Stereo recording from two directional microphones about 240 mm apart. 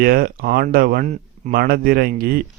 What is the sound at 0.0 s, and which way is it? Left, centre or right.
Speech, right.